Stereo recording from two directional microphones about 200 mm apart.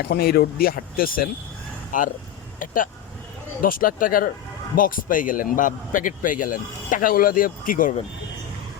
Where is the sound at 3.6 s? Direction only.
45° left (ahead or behind).